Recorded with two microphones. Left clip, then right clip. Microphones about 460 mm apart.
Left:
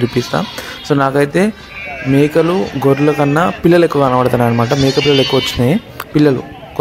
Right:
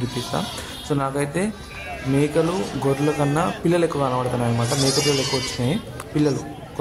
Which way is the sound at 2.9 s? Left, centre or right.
Right.